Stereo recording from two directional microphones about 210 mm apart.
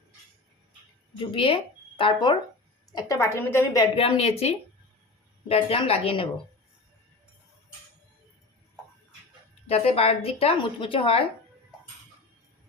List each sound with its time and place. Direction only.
1.3 s a woman's voice: 25° left (ahead or behind)
3.9 s speech: 30° left (ahead or behind)
9.6 s speech: 30° left (ahead or behind)